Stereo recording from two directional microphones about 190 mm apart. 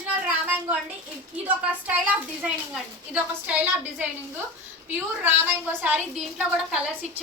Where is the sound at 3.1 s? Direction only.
10° right (ahead or behind).